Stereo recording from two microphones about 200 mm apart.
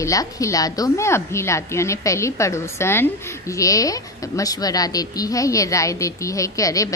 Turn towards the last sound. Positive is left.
turn(degrees=15)  # may be behind; listen again after turning